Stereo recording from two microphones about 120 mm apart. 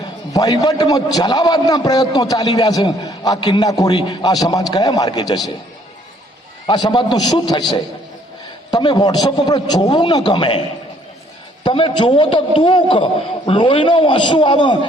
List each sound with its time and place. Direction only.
0.3 s a man's voice: 35° left (ahead or behind)
6.7 s a man's voice: 35° left (ahead or behind)
8.7 s a man's voice: 35° left (ahead or behind)
11.6 s a man's voice: 45° left (ahead or behind)